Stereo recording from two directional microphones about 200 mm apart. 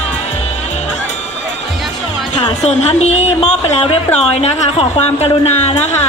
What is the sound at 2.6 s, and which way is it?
A woman's voice, 35° left (ahead or behind).